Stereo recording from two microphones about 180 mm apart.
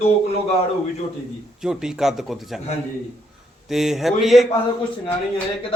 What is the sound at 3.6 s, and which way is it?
Speech, centre (ahead or behind).